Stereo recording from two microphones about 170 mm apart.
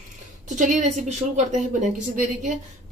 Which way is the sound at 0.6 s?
45° right (ahead or behind).